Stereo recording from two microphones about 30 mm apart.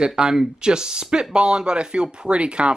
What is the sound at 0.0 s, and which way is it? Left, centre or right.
A man's voice, right.